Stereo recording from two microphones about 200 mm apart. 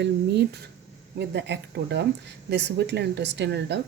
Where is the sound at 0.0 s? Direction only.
55° right (ahead or behind).